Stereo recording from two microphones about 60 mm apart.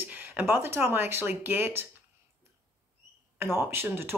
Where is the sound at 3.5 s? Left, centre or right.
Right.